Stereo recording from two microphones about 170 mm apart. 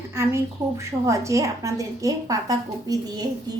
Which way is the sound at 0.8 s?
20° right (ahead or behind).